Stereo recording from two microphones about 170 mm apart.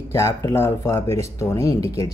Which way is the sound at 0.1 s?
15° left (ahead or behind).